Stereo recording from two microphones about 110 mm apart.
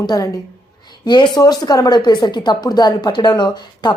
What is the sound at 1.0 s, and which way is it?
A woman's voice, 45° left (ahead or behind).